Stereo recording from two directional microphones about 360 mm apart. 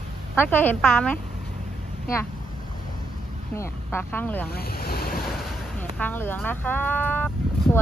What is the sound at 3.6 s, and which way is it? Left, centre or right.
Speech, centre.